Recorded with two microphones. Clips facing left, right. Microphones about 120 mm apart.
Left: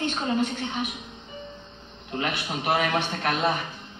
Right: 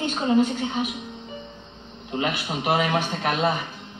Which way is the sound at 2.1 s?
15° right (ahead or behind).